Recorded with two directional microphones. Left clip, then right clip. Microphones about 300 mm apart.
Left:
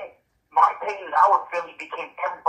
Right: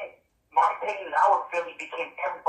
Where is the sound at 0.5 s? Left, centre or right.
Centre.